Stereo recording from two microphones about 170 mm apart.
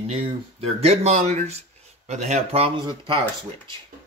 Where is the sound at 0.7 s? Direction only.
40° right (ahead or behind).